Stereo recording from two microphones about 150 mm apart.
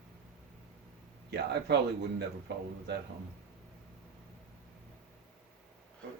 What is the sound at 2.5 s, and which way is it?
Speech, 90° right.